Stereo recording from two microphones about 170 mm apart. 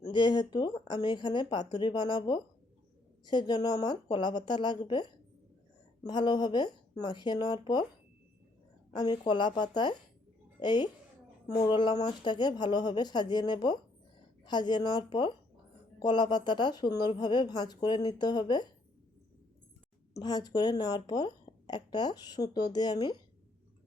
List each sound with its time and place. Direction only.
0.0 s speech: 25° left (ahead or behind)
8.9 s a woman's voice: 25° left (ahead or behind)
20.1 s speech: 25° left (ahead or behind)